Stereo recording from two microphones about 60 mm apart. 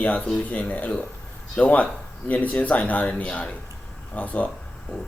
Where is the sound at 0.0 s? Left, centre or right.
Left.